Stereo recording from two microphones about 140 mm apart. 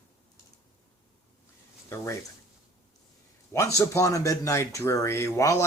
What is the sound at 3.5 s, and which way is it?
Speech, 20° left (ahead or behind).